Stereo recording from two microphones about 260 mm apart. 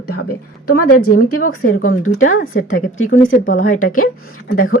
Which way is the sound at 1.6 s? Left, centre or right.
Left.